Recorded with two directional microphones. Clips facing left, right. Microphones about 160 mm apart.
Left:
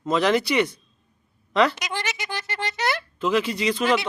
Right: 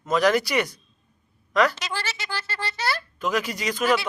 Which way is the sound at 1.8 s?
15° left (ahead or behind).